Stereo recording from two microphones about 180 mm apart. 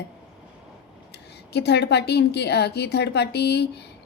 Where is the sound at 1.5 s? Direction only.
70° left (ahead or behind).